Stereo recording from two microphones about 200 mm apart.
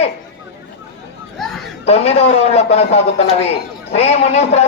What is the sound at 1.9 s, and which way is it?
Speech, 30° left (ahead or behind).